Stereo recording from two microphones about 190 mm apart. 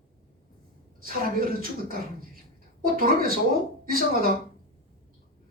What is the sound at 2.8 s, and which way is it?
Speech, 50° right (ahead or behind).